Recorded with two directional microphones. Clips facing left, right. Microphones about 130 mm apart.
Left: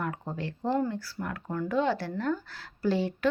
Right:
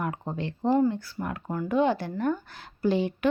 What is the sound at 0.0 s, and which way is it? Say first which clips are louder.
Speech: right 2 dB; 20° right (ahead or behind).